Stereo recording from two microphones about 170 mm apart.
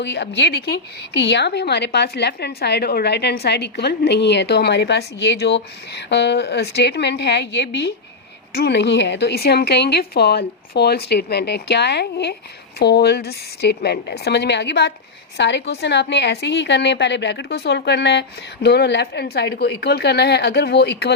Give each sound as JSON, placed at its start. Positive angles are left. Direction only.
{"t": 0.0, "sound": "a woman's voice", "side_deg": 90}